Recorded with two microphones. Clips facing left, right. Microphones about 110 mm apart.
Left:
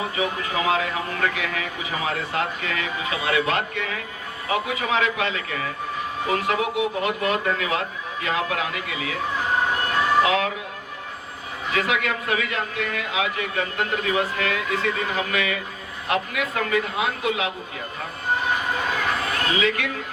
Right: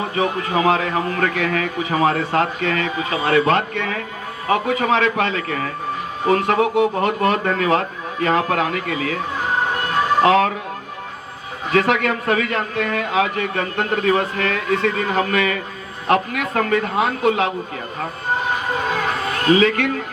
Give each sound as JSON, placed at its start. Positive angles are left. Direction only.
{"t": 0.2, "sound": "a man's voice", "side_deg": -45}
{"t": 10.2, "sound": "speech", "side_deg": -40}
{"t": 11.7, "sound": "a man's voice", "side_deg": -45}
{"t": 19.5, "sound": "a man's voice", "side_deg": -40}